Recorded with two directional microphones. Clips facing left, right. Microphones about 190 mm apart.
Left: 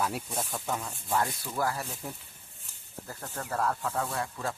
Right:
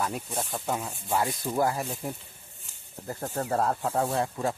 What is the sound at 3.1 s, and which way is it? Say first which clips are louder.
Speech: right 7 dB; 30° right (ahead or behind).